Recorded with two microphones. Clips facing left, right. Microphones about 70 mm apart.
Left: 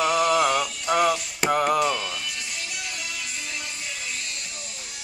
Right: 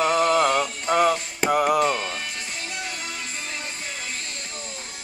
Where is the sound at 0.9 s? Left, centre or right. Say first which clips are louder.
Right 1 dB; right.